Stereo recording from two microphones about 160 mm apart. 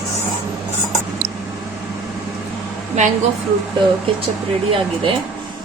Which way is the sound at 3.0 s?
45° right (ahead or behind).